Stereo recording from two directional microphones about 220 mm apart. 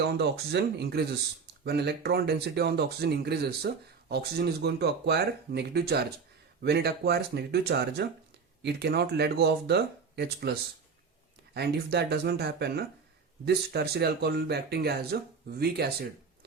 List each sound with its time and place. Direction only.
0.1 s speech: 45° right (ahead or behind)